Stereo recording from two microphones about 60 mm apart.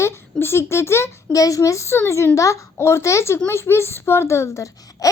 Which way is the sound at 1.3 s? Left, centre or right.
Left.